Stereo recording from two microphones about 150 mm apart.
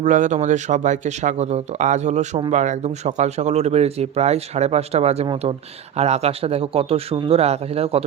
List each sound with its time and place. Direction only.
0.0 s a man's voice: 55° right (ahead or behind)